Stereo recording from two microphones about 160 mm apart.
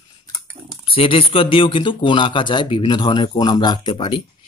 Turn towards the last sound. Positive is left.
turn(degrees=30)  # may be behind; listen again after turning